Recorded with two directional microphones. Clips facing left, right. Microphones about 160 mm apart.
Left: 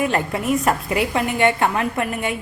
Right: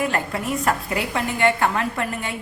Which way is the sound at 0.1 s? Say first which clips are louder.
Left 4 dB; 20° left (ahead or behind).